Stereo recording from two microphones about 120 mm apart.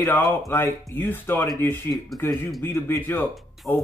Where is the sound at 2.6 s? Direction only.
20° left (ahead or behind).